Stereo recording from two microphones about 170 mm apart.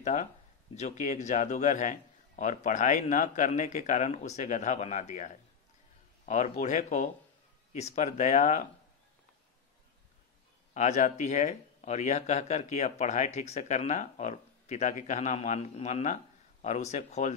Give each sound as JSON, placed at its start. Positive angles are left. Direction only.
{"t": 0.0, "sound": "speech", "side_deg": 45}
{"t": 10.7, "sound": "speech", "side_deg": 45}